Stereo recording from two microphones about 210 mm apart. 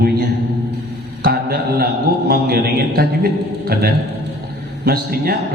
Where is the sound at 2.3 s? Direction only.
45° right (ahead or behind).